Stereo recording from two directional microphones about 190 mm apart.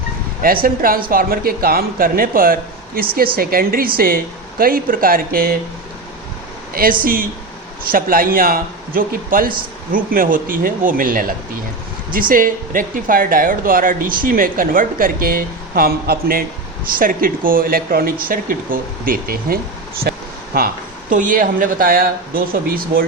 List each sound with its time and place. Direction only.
0.4 s speech: 50° right (ahead or behind)
7.0 s speech: 50° right (ahead or behind)
20.0 s a sound: 55° right (ahead or behind)
21.1 s speech: 45° right (ahead or behind)